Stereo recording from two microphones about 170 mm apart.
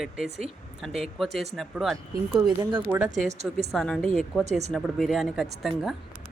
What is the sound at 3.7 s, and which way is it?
Speech, 5° left (ahead or behind).